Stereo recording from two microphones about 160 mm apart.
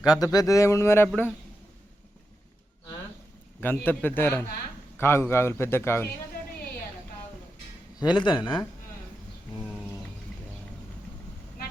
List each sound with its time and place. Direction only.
0.1 s a man's voice: 25° left (ahead or behind)
3.6 s a man's voice: 10° left (ahead or behind)
7.9 s a man's voice: 25° left (ahead or behind)